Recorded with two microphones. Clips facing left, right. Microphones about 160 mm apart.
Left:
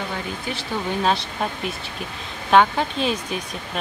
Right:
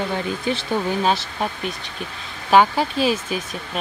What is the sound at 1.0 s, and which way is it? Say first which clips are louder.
Speech: right 1 dB; centre (ahead or behind).